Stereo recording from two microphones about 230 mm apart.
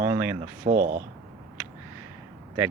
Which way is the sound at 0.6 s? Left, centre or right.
Right.